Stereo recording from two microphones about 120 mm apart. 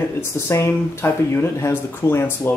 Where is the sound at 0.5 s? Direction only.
20° left (ahead or behind).